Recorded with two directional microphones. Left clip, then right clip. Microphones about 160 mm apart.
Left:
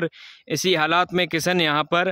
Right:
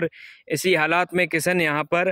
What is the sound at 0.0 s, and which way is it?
Speech, 10° left (ahead or behind).